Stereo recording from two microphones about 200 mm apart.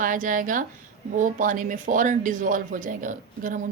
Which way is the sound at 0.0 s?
40° right (ahead or behind).